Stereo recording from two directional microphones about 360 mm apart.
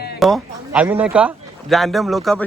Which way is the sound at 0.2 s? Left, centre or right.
Centre.